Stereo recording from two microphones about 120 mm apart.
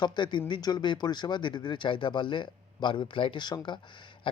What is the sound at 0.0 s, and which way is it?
A man's voice, 40° left (ahead or behind).